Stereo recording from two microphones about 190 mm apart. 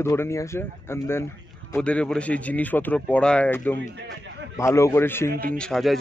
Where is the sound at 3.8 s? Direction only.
70° right (ahead or behind).